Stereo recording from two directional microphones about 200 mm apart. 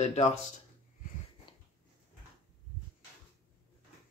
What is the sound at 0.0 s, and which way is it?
Speech, 35° left (ahead or behind).